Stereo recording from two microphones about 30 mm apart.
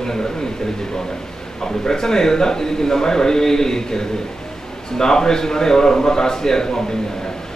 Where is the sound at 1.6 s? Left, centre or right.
Centre.